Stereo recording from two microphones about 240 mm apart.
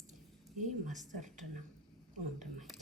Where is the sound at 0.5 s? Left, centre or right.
Right.